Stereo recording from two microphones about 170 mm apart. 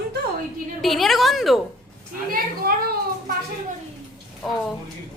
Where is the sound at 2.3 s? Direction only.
60° right (ahead or behind).